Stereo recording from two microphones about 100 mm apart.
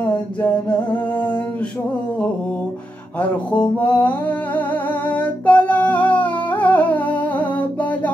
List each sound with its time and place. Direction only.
0.0 s music: 15° left (ahead or behind)
3.2 s music: 15° left (ahead or behind)